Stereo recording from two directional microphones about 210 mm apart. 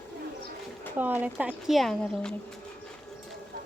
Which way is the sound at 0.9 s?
10° right (ahead or behind).